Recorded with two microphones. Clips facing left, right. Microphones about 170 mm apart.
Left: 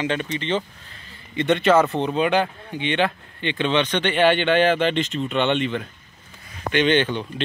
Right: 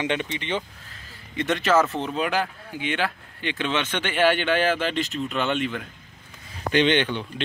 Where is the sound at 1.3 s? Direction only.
Centre (ahead or behind).